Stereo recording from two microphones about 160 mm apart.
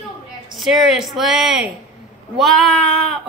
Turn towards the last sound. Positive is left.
turn(degrees=5)  # may be behind; listen again after turning